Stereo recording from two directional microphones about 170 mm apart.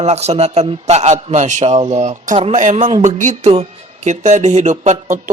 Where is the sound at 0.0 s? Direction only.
40° right (ahead or behind).